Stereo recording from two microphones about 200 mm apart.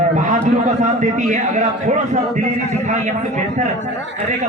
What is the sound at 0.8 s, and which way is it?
A man's voice, 35° right (ahead or behind).